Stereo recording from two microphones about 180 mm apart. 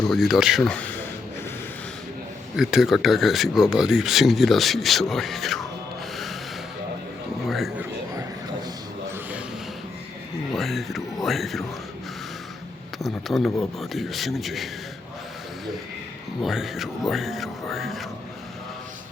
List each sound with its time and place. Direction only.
0.1 s speech: centre (ahead or behind)
2.6 s speech: centre (ahead or behind)
7.4 s speech: centre (ahead or behind)
10.5 s speech: centre (ahead or behind)
13.0 s speech: centre (ahead or behind)
16.4 s speech: centre (ahead or behind)
17.1 s music: centre (ahead or behind)